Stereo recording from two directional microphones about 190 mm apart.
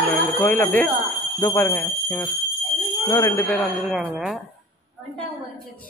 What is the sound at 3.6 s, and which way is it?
Speech, centre (ahead or behind).